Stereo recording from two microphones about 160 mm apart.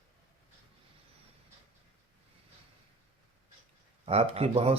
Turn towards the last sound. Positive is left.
turn(degrees=-40)  # may be behind; listen again after turning